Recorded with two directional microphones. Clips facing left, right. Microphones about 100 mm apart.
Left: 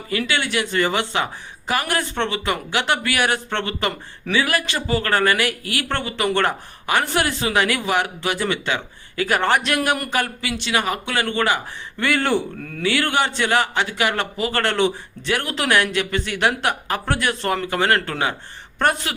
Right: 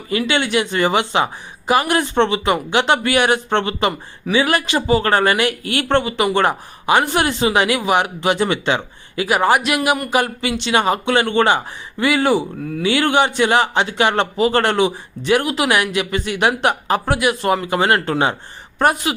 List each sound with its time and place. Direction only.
0.1 s speech: 20° right (ahead or behind)
9.2 s speech: 10° right (ahead or behind)
11.9 s a man's voice: 15° right (ahead or behind)